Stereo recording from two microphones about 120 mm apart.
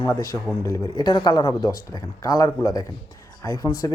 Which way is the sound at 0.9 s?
35° left (ahead or behind).